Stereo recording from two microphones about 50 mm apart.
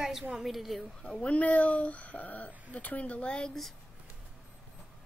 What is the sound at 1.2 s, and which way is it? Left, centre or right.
Speech, left.